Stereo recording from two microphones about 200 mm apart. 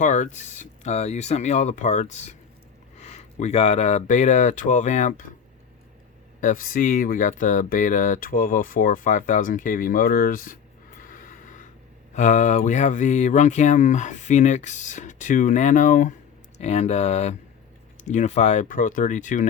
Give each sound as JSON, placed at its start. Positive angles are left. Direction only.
{"t": 0.0, "sound": "speech", "side_deg": 40}
{"t": 6.4, "sound": "speech", "side_deg": 40}
{"t": 11.0, "sound": "gasp", "side_deg": 45}
{"t": 12.1, "sound": "speech", "side_deg": 35}